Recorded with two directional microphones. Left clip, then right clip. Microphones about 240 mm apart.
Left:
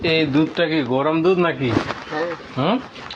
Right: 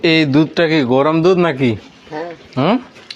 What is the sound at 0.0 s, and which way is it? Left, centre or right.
A man's voice, right.